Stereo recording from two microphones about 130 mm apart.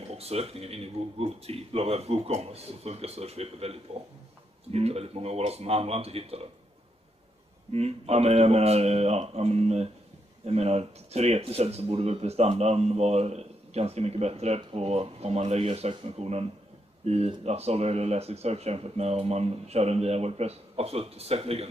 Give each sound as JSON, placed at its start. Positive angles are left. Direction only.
{"t": 0.1, "sound": "speech", "side_deg": -55}
{"t": 4.7, "sound": "speech", "side_deg": -50}
{"t": 7.7, "sound": "speech", "side_deg": -55}